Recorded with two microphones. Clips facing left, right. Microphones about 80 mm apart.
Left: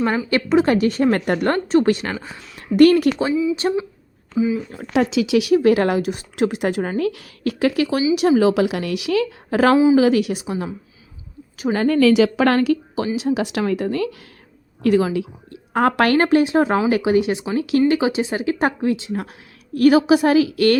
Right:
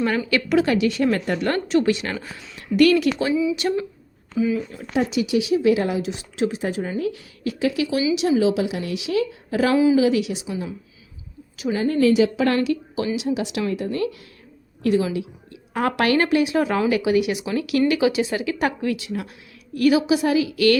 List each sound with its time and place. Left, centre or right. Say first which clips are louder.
0.3 s a woman's voice: left 4 dB; left
1.5 s a woman's voice: left 3 dB; left
4.4 s speech: left 2 dB; centre
4.9 s a woman's voice: left 4 dB; left
6.5 s a woman's voice: left 4 dB; left
11.8 s a woman's voice: left 3 dB; left
12.5 s a woman's voice: left 4 dB; left
15.7 s a woman's voice: left 4 dB; left
19.7 s a woman's voice: left 4 dB; left